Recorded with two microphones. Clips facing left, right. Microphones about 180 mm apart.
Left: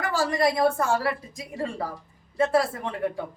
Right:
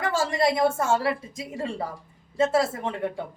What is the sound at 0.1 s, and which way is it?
A woman's voice, 25° right (ahead or behind).